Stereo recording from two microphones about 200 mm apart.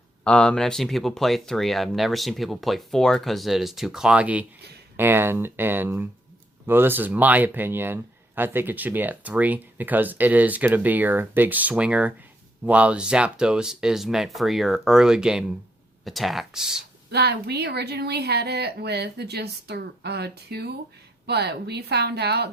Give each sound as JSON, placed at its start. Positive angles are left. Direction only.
{"t": 0.3, "sound": "speech", "side_deg": 5}
{"t": 17.1, "sound": "speech", "side_deg": -55}